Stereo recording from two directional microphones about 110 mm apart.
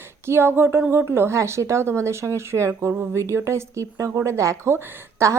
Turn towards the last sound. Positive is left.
turn(degrees=-25)  # may be behind; listen again after turning